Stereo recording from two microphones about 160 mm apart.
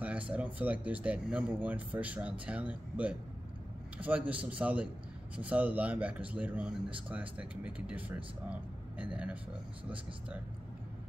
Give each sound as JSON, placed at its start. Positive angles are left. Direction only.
{"t": 0.3, "sound": "speech", "side_deg": -10}